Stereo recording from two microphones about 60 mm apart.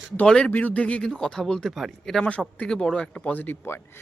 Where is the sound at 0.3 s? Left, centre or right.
Centre.